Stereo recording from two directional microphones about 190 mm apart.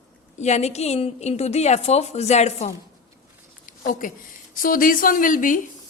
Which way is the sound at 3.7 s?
45° left (ahead or behind).